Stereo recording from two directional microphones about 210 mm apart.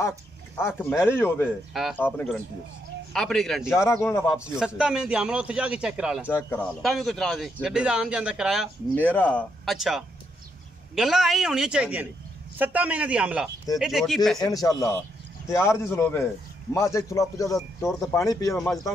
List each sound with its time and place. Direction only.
0.6 s speech: 10° left (ahead or behind)
1.7 s a man's voice: centre (ahead or behind)
3.8 s speech: 10° left (ahead or behind)
4.6 s a man's voice: 5° right (ahead or behind)
6.2 s a man's voice: 10° left (ahead or behind)
8.9 s a man's voice: 5° left (ahead or behind)
14.4 s speech: 15° left (ahead or behind)